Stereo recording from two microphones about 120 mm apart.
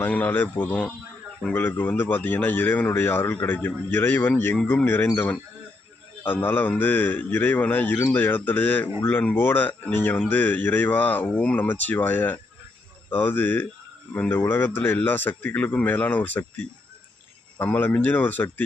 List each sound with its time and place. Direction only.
0.0 s a man's voice: 15° left (ahead or behind)
17.6 s a man's voice: 15° left (ahead or behind)